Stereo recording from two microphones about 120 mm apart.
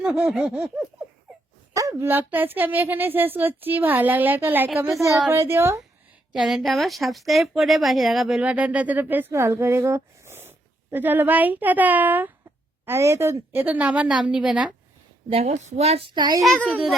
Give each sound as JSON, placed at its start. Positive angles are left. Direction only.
{"t": 0.3, "sound": "speech", "side_deg": -5}
{"t": 1.3, "sound": "a sound", "side_deg": 0}
{"t": 1.7, "sound": "a woman's voice", "side_deg": -30}
{"t": 6.3, "sound": "speech", "side_deg": 0}
{"t": 15.3, "sound": "a woman's voice", "side_deg": -55}
{"t": 16.1, "sound": "a child's voice", "side_deg": -40}